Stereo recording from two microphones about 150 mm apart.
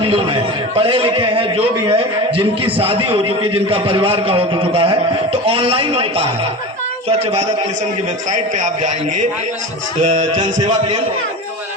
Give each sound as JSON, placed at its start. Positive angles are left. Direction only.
{"t": 0.0, "sound": "a man's voice", "side_deg": -40}
{"t": 7.2, "sound": "music", "side_deg": -45}
{"t": 8.3, "sound": "a man's voice", "side_deg": -55}
{"t": 10.0, "sound": "music", "side_deg": -50}